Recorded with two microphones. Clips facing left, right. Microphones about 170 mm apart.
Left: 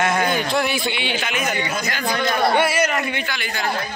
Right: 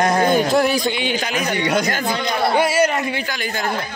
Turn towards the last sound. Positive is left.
turn(degrees=-35)  # may be behind; listen again after turning